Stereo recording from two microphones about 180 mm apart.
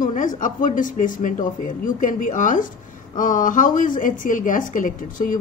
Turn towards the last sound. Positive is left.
turn(degrees=50)  # may be behind; listen again after turning